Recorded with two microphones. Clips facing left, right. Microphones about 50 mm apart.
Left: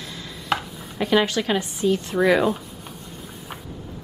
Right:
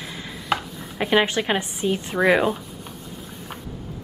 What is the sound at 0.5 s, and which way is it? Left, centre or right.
Chopping, centre.